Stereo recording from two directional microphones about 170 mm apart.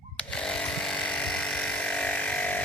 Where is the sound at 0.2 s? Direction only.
5° left (ahead or behind).